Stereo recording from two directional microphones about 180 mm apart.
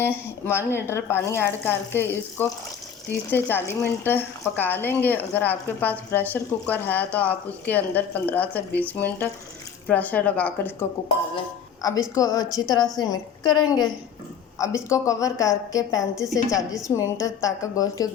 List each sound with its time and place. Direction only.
0.0 s a woman's voice: 15° left (ahead or behind)